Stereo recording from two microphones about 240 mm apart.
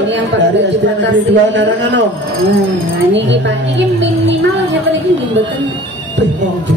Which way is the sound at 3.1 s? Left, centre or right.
Right.